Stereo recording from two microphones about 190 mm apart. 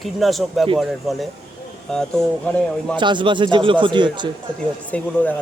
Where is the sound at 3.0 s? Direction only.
25° right (ahead or behind).